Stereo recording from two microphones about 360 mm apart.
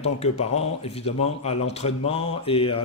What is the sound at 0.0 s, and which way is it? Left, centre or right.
Speech, centre.